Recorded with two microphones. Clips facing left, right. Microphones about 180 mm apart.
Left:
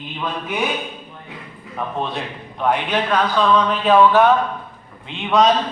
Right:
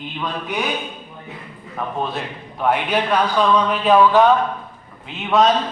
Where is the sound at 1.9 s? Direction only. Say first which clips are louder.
Even; centre (ahead or behind).